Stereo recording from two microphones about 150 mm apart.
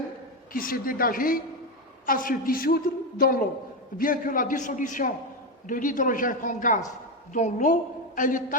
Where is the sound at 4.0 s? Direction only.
65° left (ahead or behind).